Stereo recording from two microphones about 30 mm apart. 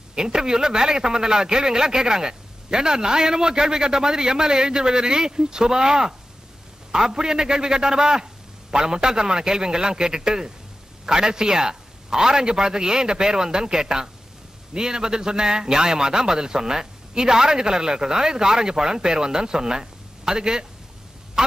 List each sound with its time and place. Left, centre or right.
0.1 s a man's voice: right